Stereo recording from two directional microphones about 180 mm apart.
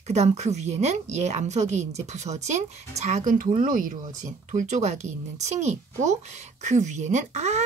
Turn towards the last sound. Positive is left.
turn(degrees=-40)  # may be behind; listen again after turning